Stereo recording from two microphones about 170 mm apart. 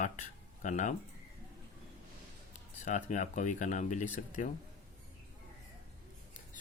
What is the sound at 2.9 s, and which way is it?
Speech, 45° left (ahead or behind).